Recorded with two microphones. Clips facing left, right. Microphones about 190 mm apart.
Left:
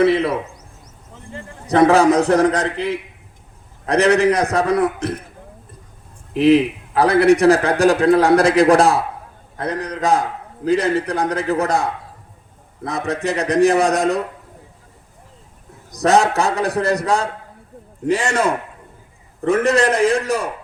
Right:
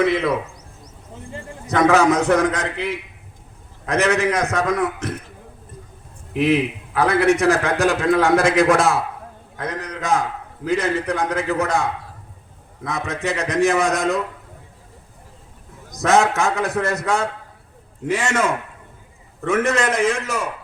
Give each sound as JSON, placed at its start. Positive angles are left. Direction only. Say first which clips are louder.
{"t": 0.0, "sound": "a man's voice", "louder": "left 4 dB", "side_deg": 35}
{"t": 1.6, "sound": "a man's voice", "louder": "left 3 dB", "side_deg": 35}
{"t": 6.4, "sound": "a man's voice", "louder": "left 5 dB", "side_deg": 35}
{"t": 13.1, "sound": "a man's voice", "louder": "left 5 dB", "side_deg": 35}
{"t": 15.9, "sound": "a man's voice", "louder": "left 2 dB", "side_deg": 35}